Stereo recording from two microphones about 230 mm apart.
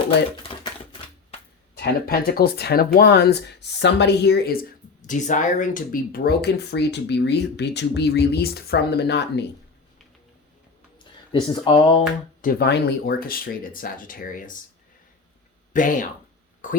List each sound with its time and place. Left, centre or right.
0.4 s typewriter: left
1.7 s speech: left
5.0 s speech: left
11.3 s speech: centre
12.4 s speech: left
15.7 s speech: left